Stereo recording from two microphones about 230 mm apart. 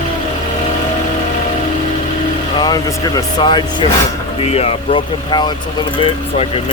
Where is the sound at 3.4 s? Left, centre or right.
Left.